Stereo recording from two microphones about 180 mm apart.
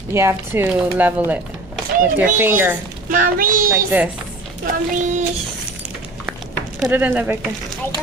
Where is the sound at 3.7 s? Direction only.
15° right (ahead or behind).